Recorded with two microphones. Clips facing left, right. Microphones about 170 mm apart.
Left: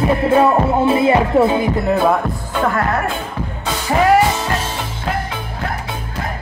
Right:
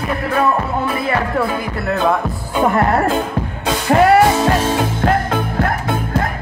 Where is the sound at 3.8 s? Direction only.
55° right (ahead or behind).